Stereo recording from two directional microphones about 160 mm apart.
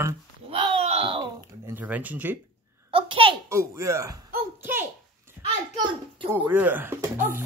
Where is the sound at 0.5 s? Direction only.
35° right (ahead or behind).